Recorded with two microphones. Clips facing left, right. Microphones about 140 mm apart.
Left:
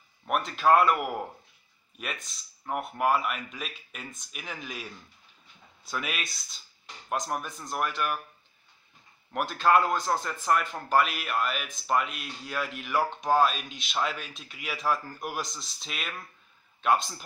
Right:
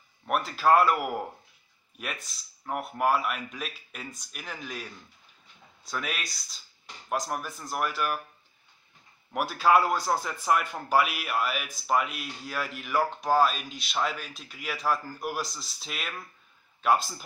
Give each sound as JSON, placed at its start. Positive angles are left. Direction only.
{"t": 0.3, "sound": "speech", "side_deg": 0}
{"t": 5.9, "sound": "speech", "side_deg": 5}
{"t": 9.3, "sound": "a man's voice", "side_deg": -5}